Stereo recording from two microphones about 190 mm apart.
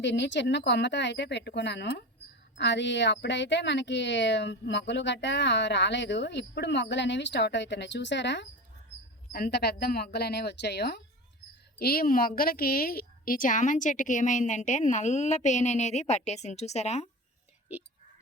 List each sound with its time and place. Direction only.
0.0 s a woman's voice: 65° left (ahead or behind); by 17.1 s 35° left (ahead or behind)